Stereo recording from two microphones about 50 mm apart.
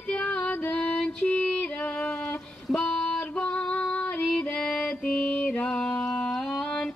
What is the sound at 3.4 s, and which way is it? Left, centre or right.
Female singing, left.